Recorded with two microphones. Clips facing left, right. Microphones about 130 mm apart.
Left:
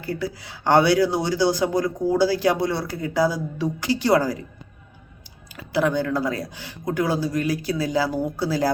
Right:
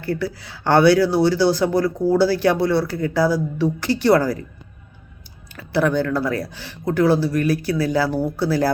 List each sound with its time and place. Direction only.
0.0 s speech: 20° left (ahead or behind)
5.5 s speech: 20° left (ahead or behind)